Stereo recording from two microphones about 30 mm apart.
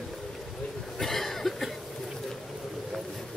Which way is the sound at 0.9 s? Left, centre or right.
Centre.